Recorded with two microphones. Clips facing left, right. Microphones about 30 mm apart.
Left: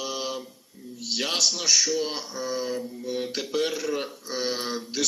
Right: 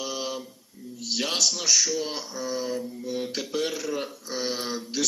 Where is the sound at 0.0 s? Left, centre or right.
Left.